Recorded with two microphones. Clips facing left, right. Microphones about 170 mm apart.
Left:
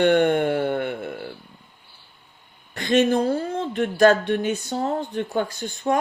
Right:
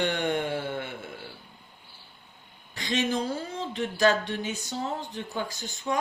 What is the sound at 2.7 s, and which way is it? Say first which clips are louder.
Speech: left 9 dB; 55° left (ahead or behind).